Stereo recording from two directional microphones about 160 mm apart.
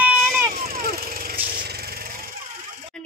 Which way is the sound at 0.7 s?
65° right (ahead or behind).